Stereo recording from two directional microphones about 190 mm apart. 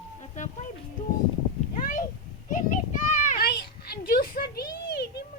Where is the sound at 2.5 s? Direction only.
40° left (ahead or behind).